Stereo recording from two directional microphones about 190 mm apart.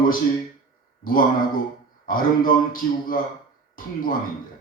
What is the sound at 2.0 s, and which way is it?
A man's voice, 45° left (ahead or behind).